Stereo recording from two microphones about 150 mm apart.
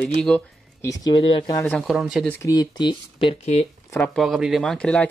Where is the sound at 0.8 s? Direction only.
30° left (ahead or behind).